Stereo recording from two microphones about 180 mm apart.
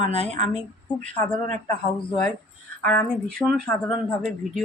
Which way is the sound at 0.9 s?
10° left (ahead or behind).